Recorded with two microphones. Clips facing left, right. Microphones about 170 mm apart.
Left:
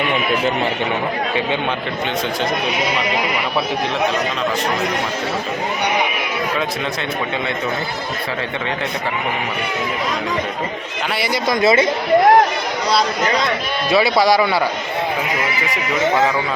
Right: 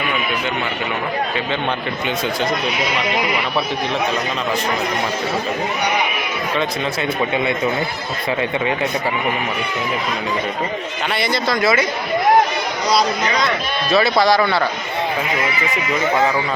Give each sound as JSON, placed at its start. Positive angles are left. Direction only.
{"t": 11.1, "sound": "speech", "side_deg": 10}
{"t": 13.9, "sound": "speech", "side_deg": 10}